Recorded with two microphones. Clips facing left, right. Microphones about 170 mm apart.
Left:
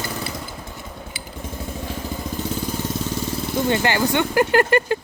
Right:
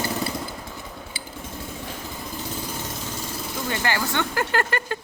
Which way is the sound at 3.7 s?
20° left (ahead or behind).